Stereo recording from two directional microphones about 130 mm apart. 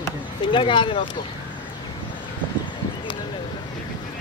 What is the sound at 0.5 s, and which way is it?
Speech, 40° left (ahead or behind).